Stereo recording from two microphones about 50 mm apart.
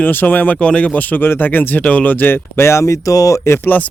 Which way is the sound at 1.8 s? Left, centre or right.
Left.